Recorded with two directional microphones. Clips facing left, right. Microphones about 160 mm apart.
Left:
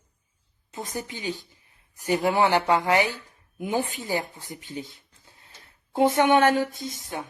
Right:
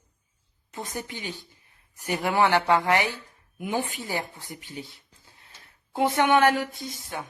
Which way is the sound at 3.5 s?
30° left (ahead or behind).